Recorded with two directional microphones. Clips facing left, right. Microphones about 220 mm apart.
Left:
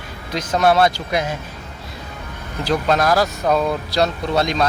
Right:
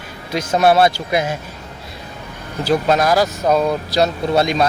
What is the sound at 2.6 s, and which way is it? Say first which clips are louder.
Speech: right 2 dB; 5° right (ahead or behind).